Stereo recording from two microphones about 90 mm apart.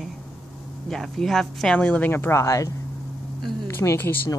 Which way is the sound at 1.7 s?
15° left (ahead or behind).